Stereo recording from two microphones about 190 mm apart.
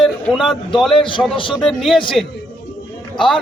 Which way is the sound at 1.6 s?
Centre (ahead or behind).